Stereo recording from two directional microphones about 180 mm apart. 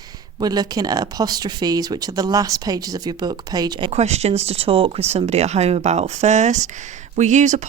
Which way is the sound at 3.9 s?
35° right (ahead or behind).